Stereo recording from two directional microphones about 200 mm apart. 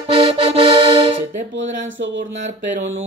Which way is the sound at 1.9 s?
70° right (ahead or behind).